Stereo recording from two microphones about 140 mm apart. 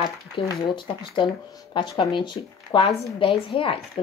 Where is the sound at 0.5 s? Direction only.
35° left (ahead or behind).